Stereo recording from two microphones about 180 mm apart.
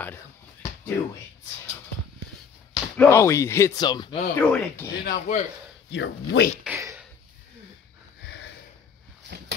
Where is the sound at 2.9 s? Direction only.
15° left (ahead or behind).